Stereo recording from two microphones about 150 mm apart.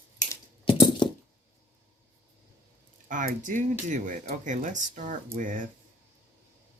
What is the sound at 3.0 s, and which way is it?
Speech, 60° right (ahead or behind).